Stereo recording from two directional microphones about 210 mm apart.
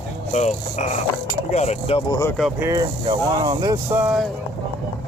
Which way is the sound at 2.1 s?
15° left (ahead or behind).